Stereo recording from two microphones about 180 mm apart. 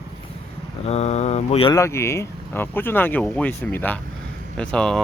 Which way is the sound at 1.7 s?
15° left (ahead or behind).